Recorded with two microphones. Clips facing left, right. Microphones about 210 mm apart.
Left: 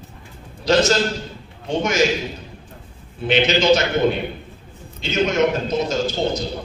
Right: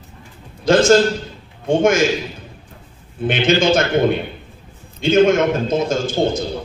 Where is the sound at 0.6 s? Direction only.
50° right (ahead or behind).